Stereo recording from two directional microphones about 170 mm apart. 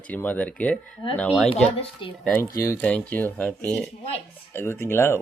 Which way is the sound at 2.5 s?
20° left (ahead or behind).